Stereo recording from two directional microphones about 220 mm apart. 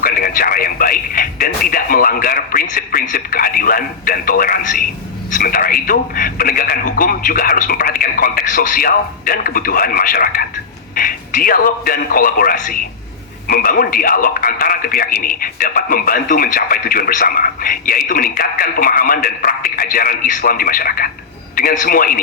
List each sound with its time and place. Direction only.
0.0 s a man's voice: 40° left (ahead or behind)